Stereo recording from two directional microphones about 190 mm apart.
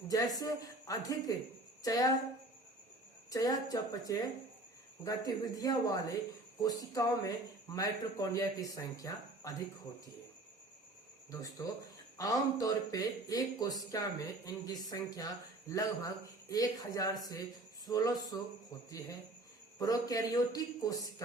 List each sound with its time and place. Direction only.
0.1 s speech: 20° left (ahead or behind)
3.2 s speech: 20° left (ahead or behind)
11.3 s speech: 20° left (ahead or behind)